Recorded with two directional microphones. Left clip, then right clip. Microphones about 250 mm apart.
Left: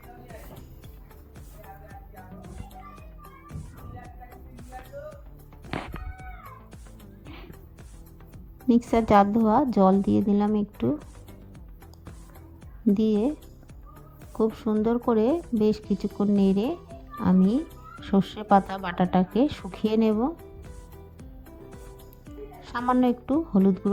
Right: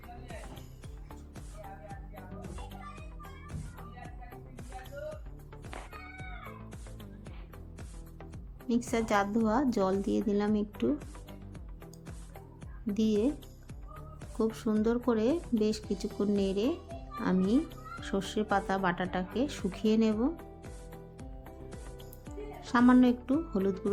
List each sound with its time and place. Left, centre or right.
1.9 s music: centre
8.6 s a woman's voice: left
12.9 s a woman's voice: left
14.3 s a woman's voice: left
22.9 s a woman's voice: left